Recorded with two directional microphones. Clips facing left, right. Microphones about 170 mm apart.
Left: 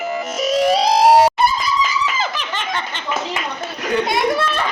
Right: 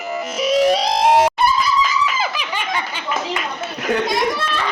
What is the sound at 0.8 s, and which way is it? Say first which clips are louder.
Music: left 4 dB; 40° left (ahead or behind).